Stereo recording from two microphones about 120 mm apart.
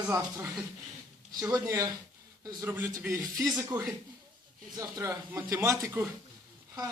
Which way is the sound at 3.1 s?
30° right (ahead or behind).